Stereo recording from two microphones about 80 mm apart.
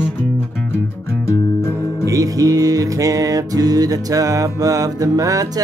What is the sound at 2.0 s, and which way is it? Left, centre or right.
Speech, right.